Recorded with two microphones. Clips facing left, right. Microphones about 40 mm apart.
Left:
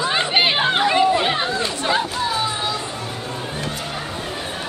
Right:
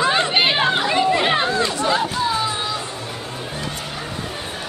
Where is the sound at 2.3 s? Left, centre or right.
Centre.